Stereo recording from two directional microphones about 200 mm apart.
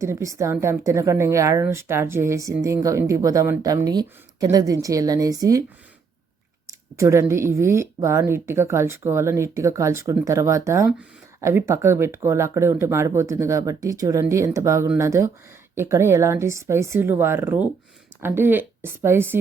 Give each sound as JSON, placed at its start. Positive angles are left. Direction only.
{"t": 0.0, "sound": "speech", "side_deg": -15}
{"t": 6.7, "sound": "speech", "side_deg": -15}